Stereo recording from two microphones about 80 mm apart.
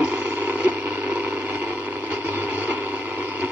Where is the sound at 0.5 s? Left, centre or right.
Centre.